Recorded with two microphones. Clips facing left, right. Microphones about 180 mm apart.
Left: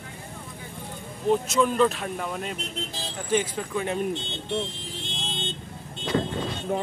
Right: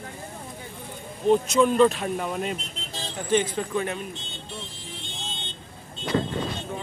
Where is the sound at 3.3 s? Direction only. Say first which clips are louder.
Right 2 dB; 5° left (ahead or behind).